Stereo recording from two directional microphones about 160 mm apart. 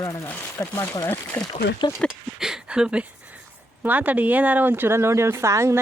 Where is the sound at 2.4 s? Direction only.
5° right (ahead or behind).